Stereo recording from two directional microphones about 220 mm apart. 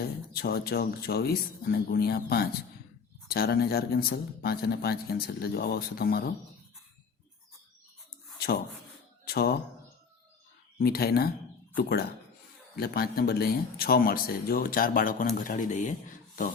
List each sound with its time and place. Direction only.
0.3 s speech: 45° left (ahead or behind)
9.2 s speech: 45° left (ahead or behind)
10.8 s speech: 45° left (ahead or behind)